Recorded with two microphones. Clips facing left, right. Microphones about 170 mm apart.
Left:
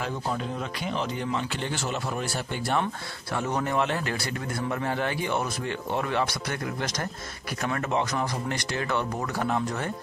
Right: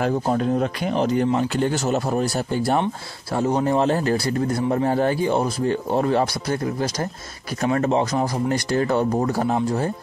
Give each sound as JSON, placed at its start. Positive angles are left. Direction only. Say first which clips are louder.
{"t": 0.0, "sound": "a man's voice", "louder": "right 9 dB", "side_deg": -50}